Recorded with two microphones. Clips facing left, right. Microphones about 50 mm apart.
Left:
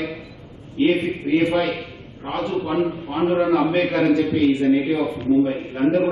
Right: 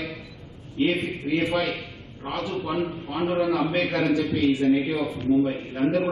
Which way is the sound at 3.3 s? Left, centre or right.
Left.